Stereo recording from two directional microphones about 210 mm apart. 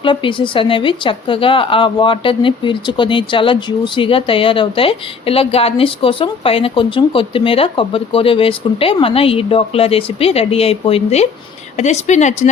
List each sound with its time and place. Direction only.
0.0 s a woman's voice: 25° left (ahead or behind)